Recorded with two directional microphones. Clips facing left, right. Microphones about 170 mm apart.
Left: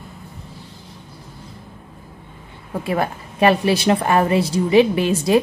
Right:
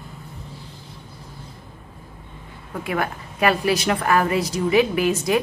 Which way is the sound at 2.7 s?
30° left (ahead or behind).